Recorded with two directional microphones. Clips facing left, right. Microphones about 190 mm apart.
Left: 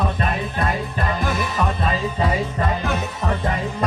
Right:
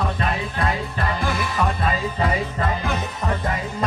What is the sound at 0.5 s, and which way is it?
Music, 15° left (ahead or behind).